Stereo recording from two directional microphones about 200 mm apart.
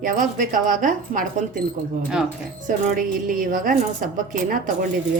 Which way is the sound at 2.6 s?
40° right (ahead or behind).